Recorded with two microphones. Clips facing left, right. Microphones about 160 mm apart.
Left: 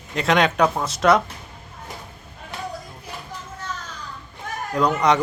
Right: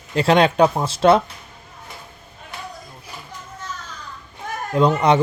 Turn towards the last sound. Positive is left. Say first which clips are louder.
# right 3 dB
turn(degrees=-30)  # may be behind; listen again after turning